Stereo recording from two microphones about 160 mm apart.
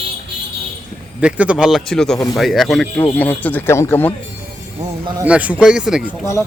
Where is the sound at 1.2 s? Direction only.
5° right (ahead or behind); by 4.1 s 15° left (ahead or behind).